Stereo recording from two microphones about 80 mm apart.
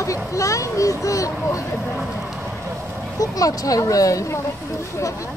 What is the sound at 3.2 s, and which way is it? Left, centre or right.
Speech, left.